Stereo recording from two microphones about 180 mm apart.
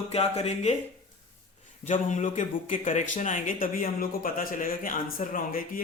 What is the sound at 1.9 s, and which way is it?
Speech, 45° left (ahead or behind).